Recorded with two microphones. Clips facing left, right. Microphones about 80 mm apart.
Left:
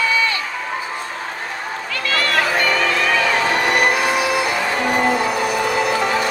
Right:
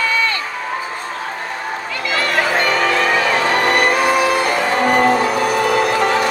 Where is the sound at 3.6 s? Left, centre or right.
Right.